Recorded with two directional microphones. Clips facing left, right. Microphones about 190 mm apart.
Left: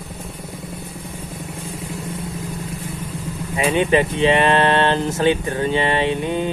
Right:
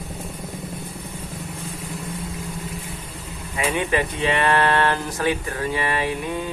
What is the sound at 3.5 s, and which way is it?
Speech, 20° left (ahead or behind).